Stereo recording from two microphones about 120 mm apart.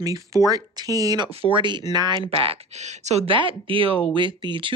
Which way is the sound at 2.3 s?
60° right (ahead or behind).